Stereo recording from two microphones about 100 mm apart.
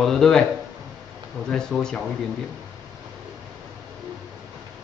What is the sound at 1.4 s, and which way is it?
Speech, 5° left (ahead or behind).